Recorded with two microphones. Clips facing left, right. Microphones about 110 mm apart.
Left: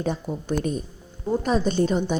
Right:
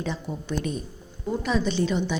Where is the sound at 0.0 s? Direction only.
45° left (ahead or behind).